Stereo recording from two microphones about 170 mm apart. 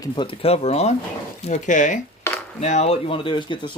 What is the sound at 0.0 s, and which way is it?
Speech, 30° left (ahead or behind).